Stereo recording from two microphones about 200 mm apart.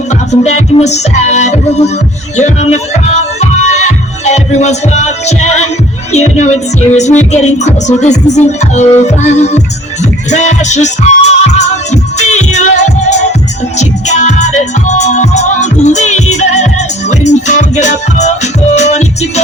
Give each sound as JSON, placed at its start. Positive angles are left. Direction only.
{"t": 0.3, "sound": "speech", "side_deg": 35}
{"t": 4.5, "sound": "speech", "side_deg": 35}
{"t": 10.0, "sound": "music", "side_deg": 35}